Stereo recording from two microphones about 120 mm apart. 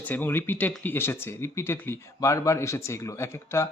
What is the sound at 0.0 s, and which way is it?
Speech, 15° left (ahead or behind).